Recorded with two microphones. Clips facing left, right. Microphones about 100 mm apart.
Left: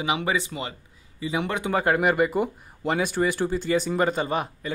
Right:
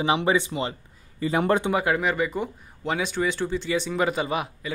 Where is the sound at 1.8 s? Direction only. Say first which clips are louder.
Left 2 dB; 45° left (ahead or behind).